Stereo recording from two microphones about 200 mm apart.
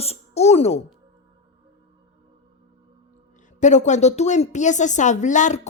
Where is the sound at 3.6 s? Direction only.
35° left (ahead or behind).